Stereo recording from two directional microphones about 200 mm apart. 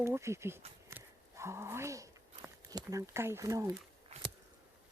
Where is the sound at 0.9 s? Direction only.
15° right (ahead or behind).